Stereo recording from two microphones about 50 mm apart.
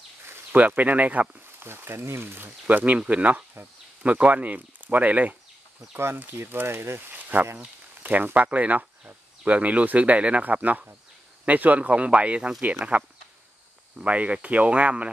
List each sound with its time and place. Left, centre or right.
0.5 s speech: right
1.6 s speech: right
2.7 s speech: right
6.3 s speech: right
7.2 s a sound: right
8.0 s speech: right